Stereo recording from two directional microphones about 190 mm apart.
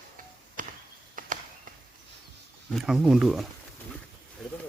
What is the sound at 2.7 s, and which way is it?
Speech, centre (ahead or behind).